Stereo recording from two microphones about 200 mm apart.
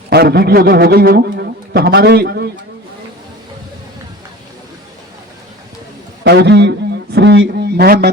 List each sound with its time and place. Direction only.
0.1 s a man's voice: 50° right (ahead or behind)
6.2 s speech: 60° right (ahead or behind)